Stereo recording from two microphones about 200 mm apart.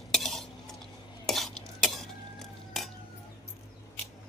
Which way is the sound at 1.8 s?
Centre (ahead or behind).